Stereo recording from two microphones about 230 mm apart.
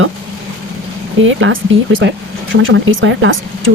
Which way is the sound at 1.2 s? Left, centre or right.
Right.